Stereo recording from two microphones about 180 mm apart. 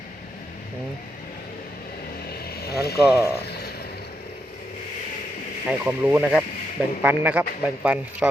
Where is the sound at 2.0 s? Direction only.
55° left (ahead or behind).